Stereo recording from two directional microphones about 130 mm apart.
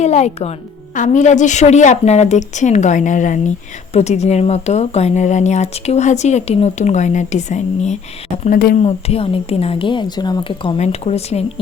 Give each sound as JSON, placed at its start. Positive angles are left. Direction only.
{"t": 0.0, "sound": "speech", "side_deg": 60}
{"t": 0.9, "sound": "a woman's voice", "side_deg": 70}
{"t": 3.9, "sound": "speech", "side_deg": 60}
{"t": 8.4, "sound": "speech", "side_deg": 85}
{"t": 8.8, "sound": "speech", "side_deg": 50}
{"t": 10.8, "sound": "speech", "side_deg": 55}